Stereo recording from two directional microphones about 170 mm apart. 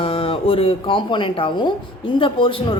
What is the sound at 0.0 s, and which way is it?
A woman's voice, 30° left (ahead or behind).